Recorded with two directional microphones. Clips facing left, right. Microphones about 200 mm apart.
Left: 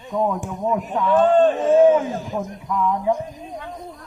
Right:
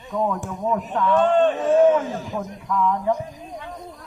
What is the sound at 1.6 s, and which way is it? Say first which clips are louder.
Speech: left 2 dB; 15° left (ahead or behind).